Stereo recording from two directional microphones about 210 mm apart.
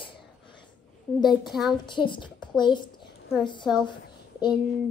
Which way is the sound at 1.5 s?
Centre (ahead or behind).